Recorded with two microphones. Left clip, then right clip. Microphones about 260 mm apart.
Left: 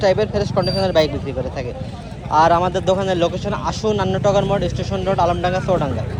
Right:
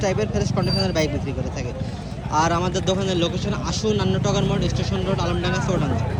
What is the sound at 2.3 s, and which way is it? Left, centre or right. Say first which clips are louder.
Speech: left 7 dB; centre.